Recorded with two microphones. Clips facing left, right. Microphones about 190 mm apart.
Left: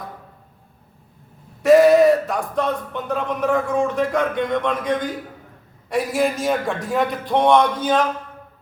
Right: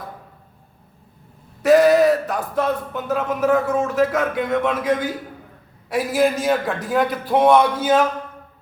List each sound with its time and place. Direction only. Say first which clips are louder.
1.6 s a man's voice: left 1 dB; centre (ahead or behind)